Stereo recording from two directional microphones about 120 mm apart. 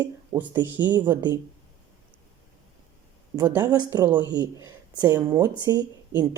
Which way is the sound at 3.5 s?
35° right (ahead or behind).